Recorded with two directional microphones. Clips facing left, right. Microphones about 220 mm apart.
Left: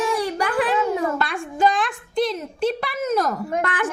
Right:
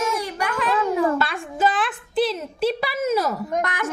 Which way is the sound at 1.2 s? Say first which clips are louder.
Left 1 dB; centre (ahead or behind).